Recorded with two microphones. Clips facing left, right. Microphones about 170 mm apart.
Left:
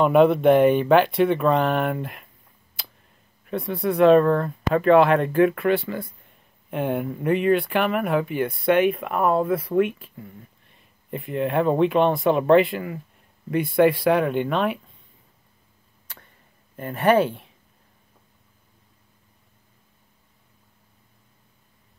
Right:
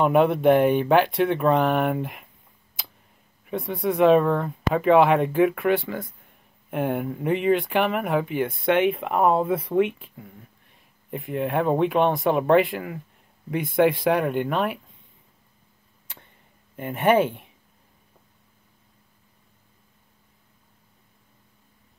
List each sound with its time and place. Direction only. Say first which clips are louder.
0.0 s speech: left 2 dB; 15° right (ahead or behind)
3.4 s speech: left 1 dB; 15° right (ahead or behind)
11.1 s speech: left 2 dB; 10° right (ahead or behind)
16.7 s speech: left 1 dB; 15° right (ahead or behind)